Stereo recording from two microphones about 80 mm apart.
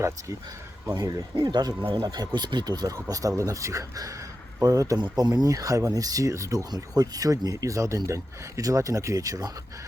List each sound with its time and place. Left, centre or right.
0.9 s speech: right
1.4 s speech: right
2.0 s speech: right
2.9 s speech: right
6.7 s speech: right